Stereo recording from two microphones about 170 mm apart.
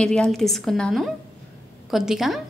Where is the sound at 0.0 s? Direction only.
5° left (ahead or behind).